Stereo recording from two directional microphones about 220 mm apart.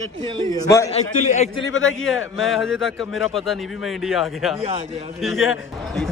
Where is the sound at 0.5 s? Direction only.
15° left (ahead or behind).